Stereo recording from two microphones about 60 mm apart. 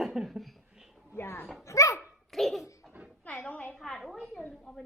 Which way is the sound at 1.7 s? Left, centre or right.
Left.